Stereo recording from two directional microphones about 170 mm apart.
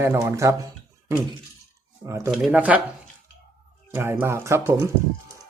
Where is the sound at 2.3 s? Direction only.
5° right (ahead or behind).